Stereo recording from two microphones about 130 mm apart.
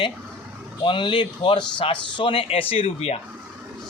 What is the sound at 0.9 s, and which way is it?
Speech, 40° left (ahead or behind).